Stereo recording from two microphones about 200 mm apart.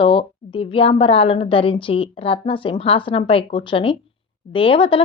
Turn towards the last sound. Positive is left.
turn(degrees=25)  # may be behind; listen again after turning